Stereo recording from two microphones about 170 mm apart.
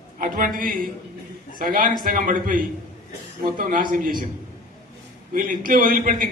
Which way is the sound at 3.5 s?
55° right (ahead or behind).